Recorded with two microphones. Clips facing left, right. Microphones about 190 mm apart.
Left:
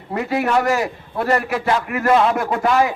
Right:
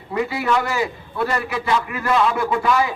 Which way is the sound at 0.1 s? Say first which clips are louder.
Left 2 dB; 45° left (ahead or behind).